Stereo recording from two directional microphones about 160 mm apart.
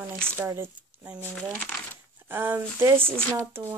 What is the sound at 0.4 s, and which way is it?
Speech, 15° right (ahead or behind).